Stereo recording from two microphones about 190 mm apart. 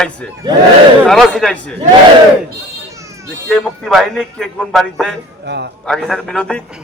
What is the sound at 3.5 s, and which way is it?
A man's voice, 5° left (ahead or behind).